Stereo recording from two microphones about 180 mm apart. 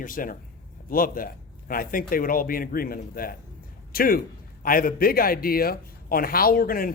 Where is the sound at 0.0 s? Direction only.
50° left (ahead or behind).